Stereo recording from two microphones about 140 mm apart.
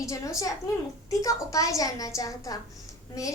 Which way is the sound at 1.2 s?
25° left (ahead or behind).